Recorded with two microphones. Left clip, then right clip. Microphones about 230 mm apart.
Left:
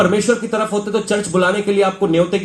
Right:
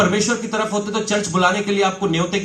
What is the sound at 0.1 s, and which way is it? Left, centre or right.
Speech, right.